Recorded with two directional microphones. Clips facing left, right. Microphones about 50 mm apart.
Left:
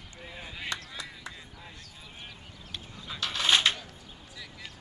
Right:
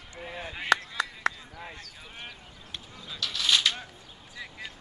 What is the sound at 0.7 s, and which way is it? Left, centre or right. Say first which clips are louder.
Chop: right 15 dB; right.